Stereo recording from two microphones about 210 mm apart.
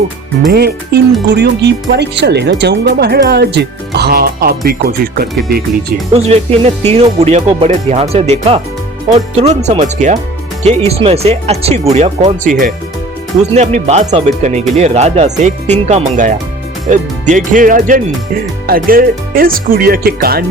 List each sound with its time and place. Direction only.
0.5 s speech: 50° right (ahead or behind)
6.1 s speech: 30° right (ahead or behind); by 20.4 s 45° right (ahead or behind)